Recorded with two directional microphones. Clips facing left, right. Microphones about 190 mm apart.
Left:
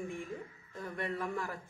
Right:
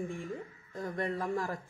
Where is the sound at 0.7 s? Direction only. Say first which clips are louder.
Right 4 dB; 40° right (ahead or behind).